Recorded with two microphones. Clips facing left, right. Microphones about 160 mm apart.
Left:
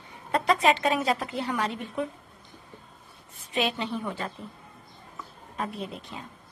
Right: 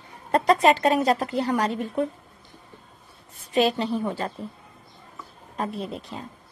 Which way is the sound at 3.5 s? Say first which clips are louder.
Right 6 dB; 40° right (ahead or behind).